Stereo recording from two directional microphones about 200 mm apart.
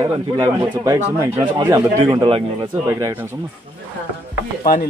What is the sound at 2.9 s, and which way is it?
Speech, 15° right (ahead or behind).